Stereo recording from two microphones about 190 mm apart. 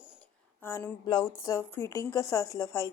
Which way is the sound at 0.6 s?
10° left (ahead or behind).